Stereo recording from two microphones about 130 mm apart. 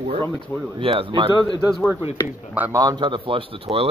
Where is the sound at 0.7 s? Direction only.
45° right (ahead or behind).